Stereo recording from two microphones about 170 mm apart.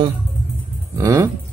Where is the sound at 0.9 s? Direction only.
20° right (ahead or behind).